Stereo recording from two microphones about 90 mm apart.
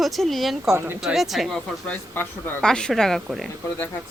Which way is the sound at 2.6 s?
10° left (ahead or behind).